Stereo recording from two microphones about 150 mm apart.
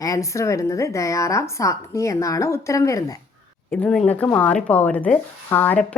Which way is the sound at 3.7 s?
5° left (ahead or behind).